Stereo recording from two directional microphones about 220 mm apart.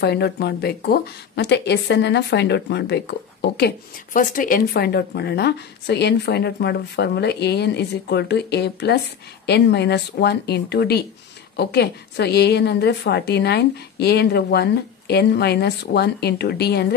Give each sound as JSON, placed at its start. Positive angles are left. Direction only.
{"t": 0.0, "sound": "speech", "side_deg": 45}